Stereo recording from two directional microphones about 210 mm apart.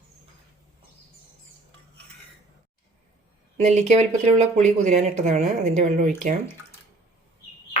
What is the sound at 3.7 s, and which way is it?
Speech, 35° right (ahead or behind).